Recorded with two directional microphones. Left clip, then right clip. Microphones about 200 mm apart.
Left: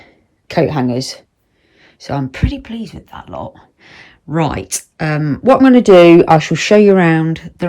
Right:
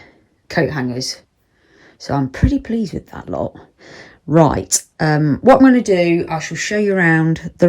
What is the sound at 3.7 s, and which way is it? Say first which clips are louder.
Speech: right 1 dB; 20° right (ahead or behind).